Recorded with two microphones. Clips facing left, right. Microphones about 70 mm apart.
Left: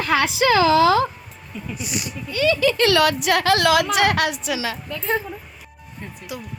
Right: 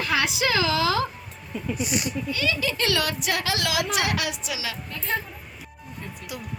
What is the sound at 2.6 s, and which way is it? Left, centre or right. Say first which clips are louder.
A woman's voice: left 11 dB; left.